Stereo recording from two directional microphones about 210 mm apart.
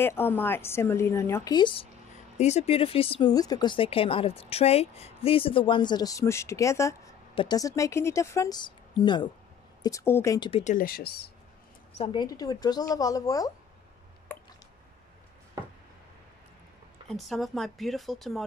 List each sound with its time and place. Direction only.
0.0 s speech: 10° left (ahead or behind)
10.5 s speech: 35° left (ahead or behind)
12.0 s speech: 20° left (ahead or behind)
17.1 s speech: centre (ahead or behind)